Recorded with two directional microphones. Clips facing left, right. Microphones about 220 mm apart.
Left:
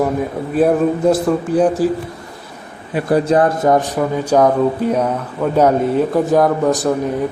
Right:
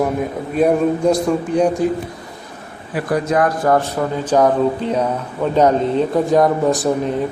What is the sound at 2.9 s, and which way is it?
A man's voice, 30° left (ahead or behind).